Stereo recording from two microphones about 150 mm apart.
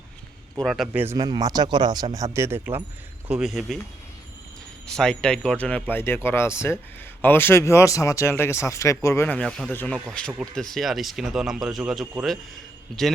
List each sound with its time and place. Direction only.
0.6 s speech: centre (ahead or behind)
1.0 s speech: 25° right (ahead or behind)
3.2 s speech: 5° right (ahead or behind)
4.9 s speech: 5° left (ahead or behind)